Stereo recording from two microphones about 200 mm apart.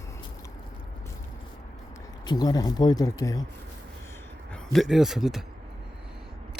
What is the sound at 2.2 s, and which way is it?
Speech, 20° left (ahead or behind).